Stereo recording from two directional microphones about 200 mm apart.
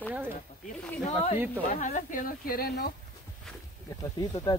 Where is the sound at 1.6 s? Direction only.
40° left (ahead or behind).